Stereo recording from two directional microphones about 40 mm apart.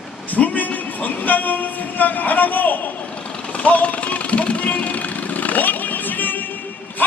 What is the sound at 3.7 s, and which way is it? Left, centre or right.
Music, left.